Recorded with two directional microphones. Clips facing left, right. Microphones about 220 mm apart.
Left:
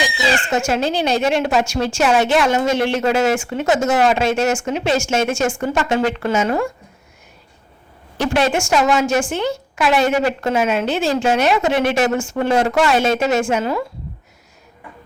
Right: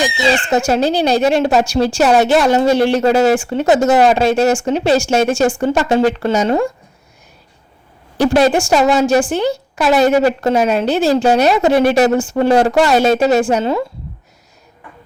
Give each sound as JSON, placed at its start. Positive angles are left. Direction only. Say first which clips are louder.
{"t": 0.5, "sound": "a woman's voice", "louder": "right 5 dB", "side_deg": -35}
{"t": 8.2, "sound": "a woman's voice", "louder": "right 6 dB", "side_deg": -35}